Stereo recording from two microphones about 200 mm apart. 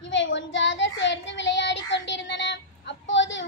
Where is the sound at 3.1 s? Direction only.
65° left (ahead or behind).